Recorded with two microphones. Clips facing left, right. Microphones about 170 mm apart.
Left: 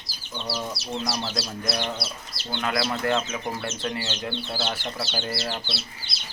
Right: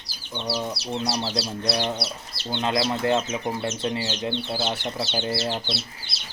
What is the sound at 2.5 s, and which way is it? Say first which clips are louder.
Speech: right 3 dB; 25° right (ahead or behind).